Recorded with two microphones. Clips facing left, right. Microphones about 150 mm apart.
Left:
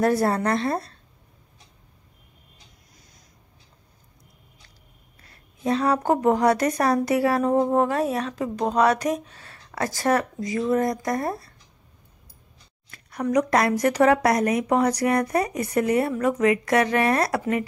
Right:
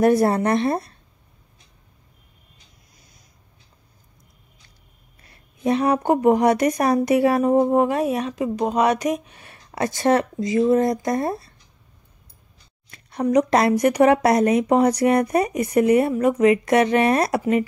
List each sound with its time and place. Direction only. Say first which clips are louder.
0.0 s a woman's voice: right 4 dB; 20° right (ahead or behind)
5.2 s a woman's voice: right 4 dB; 20° right (ahead or behind)
12.9 s a woman's voice: right 4 dB; 25° right (ahead or behind)